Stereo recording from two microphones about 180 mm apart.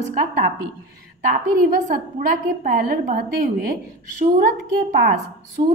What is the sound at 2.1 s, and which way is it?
A woman's voice, 55° right (ahead or behind).